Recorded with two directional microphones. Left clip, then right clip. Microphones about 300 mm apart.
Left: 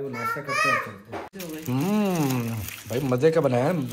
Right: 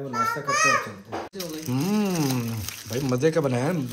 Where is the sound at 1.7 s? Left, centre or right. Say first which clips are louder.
Left 1 dB; centre.